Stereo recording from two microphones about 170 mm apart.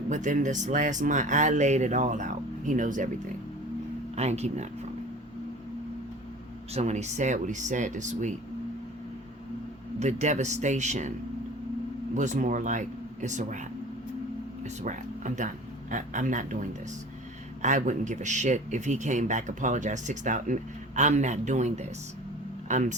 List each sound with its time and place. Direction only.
0.1 s speech: 45° right (ahead or behind)
4.1 s speech: 40° right (ahead or behind)
6.7 s speech: 40° right (ahead or behind)
10.0 s speech: 45° right (ahead or behind)
12.1 s speech: 45° right (ahead or behind)
14.6 s speech: 45° right (ahead or behind)